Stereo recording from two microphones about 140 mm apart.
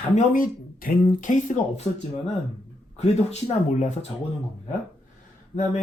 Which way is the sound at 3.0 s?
55° left (ahead or behind).